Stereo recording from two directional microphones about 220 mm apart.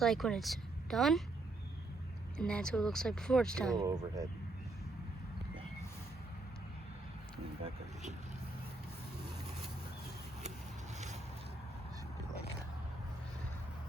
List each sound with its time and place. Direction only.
0.0 s speech: centre (ahead or behind)
2.4 s speech: 5° left (ahead or behind)
3.8 s speech: 15° right (ahead or behind)
10.9 s vehicle: 30° right (ahead or behind)